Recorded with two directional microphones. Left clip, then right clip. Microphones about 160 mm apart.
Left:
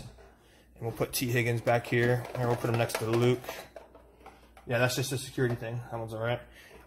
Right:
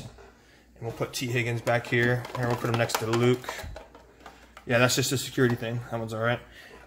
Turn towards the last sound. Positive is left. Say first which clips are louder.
# right 5 dB
turn(degrees=-15)  # may be behind; listen again after turning